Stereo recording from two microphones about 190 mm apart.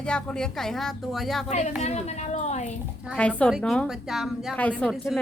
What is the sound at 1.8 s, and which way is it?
Speech, 35° left (ahead or behind).